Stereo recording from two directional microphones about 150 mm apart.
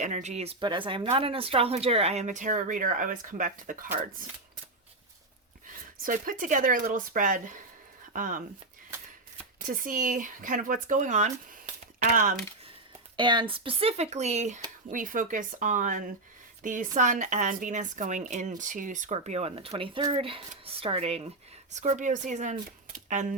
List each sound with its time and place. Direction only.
0.0 s speech: 50° right (ahead or behind)
0.6 s speech: 35° right (ahead or behind); by 3.8 s 60° right (ahead or behind)
5.6 s speech: 65° right (ahead or behind)
9.6 s speech: 65° right (ahead or behind)
13.1 s speech: 30° right (ahead or behind); by 14.6 s 50° right (ahead or behind)
14.8 s speech: 65° right (ahead or behind); by 21.2 s 40° right (ahead or behind)
21.7 s speech: 50° right (ahead or behind)